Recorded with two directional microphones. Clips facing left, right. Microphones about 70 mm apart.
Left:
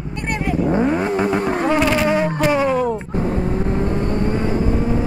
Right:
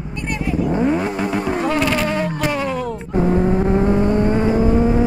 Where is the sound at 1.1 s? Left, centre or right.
Centre.